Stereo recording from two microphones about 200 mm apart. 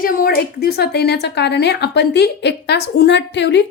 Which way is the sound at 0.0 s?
45° left (ahead or behind).